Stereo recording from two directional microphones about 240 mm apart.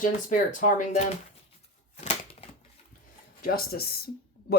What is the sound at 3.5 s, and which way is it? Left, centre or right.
Speech, left.